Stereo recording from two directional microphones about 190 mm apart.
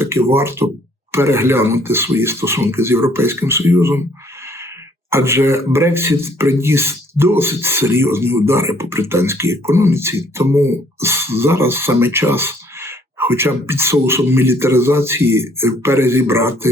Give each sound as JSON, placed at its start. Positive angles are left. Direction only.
{"t": 0.0, "sound": "a sound", "side_deg": -15}
{"t": 0.3, "sound": "speech", "side_deg": -15}
{"t": 5.1, "sound": "speech", "side_deg": -15}